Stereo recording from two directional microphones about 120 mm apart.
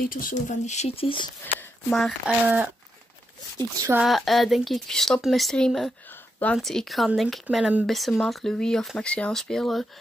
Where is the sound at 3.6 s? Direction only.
30° right (ahead or behind).